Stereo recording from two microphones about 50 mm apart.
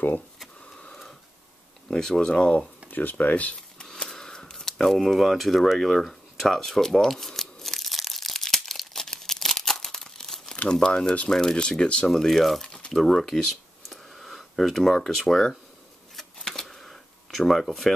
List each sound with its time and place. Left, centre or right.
1.9 s speech: centre
2.9 s speech: left
4.0 s a sound: centre
10.7 s speech: centre
12.1 s speech: centre
12.6 s a sound: centre
16.2 s camera: centre